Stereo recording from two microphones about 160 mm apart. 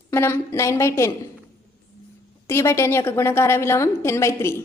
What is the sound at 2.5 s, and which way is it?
A woman's voice, 15° left (ahead or behind).